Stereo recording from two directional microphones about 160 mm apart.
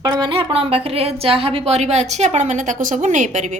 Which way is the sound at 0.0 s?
25° right (ahead or behind).